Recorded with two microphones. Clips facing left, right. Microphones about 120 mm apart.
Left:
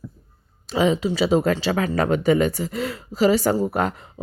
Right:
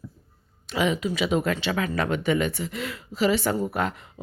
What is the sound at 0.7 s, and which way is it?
Speech, 30° left (ahead or behind).